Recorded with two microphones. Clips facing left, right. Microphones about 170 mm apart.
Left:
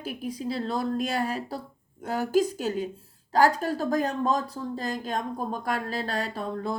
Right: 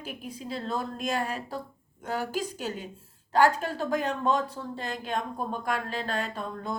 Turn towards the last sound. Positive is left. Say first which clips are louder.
# left 4 dB
turn(degrees=35)  # may be behind; listen again after turning